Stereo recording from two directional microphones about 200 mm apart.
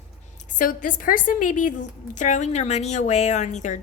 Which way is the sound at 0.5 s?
40° left (ahead or behind).